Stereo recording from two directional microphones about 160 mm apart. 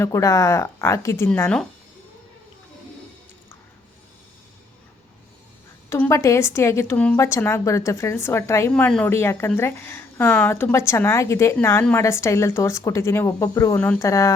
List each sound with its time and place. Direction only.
0.0 s speech: 20° left (ahead or behind)
1.3 s a woman's voice: 5° left (ahead or behind)
5.9 s a woman's voice: 20° left (ahead or behind)
8.7 s a woman's voice: 5° left (ahead or behind)